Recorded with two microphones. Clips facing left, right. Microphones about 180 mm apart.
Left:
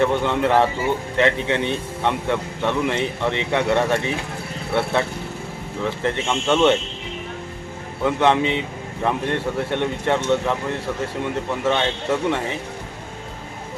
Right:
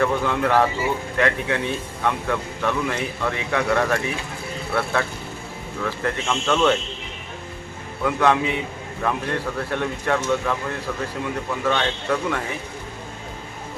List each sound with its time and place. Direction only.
0.0 s speech: 25° left (ahead or behind)
8.0 s speech: 25° left (ahead or behind)
11.6 s speech: 25° left (ahead or behind)